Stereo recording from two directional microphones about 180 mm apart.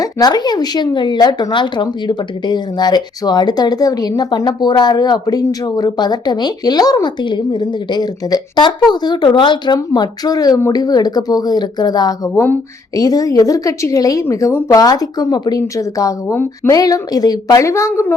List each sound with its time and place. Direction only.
0.0 s a woman's voice: 20° left (ahead or behind)